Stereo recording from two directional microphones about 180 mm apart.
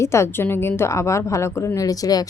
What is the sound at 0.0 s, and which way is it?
A woman's voice, 15° left (ahead or behind).